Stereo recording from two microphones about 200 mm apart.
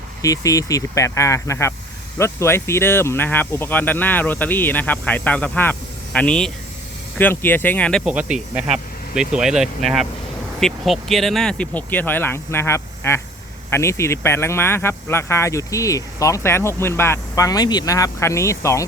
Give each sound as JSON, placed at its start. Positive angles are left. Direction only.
{"t": 0.2, "sound": "speech", "side_deg": 15}